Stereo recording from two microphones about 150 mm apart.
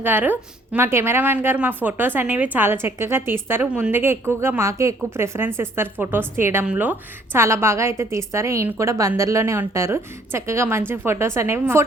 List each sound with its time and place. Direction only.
0.0 s a woman's voice: 15° right (ahead or behind)